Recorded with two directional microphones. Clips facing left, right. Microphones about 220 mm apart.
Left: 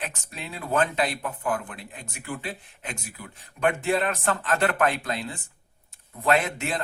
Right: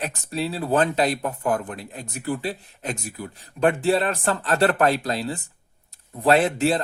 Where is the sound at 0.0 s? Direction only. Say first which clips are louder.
Right 9 dB; 35° right (ahead or behind).